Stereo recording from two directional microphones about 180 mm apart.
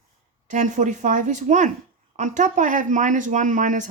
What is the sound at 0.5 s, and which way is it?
Speech, 45° right (ahead or behind).